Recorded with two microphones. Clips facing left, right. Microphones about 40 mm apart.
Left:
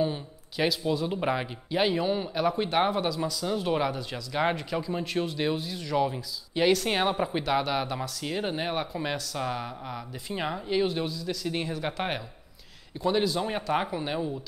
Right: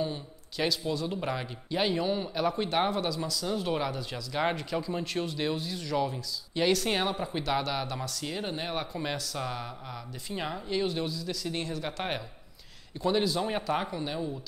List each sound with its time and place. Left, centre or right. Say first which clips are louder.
0.0 s speech: left 4 dB; centre
1.7 s a man's voice: left 2 dB; centre
13.7 s speech: left 3 dB; centre